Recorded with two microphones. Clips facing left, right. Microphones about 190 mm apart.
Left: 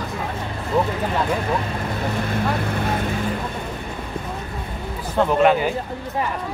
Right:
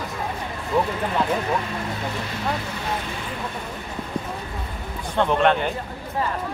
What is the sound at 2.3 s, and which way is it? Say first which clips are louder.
Speech: left 5 dB; 55° left (ahead or behind).